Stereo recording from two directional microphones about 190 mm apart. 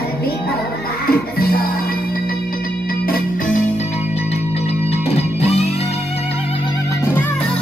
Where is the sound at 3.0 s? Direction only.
45° left (ahead or behind).